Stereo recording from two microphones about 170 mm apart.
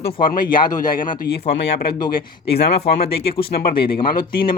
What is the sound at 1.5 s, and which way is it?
Speech, 90° left.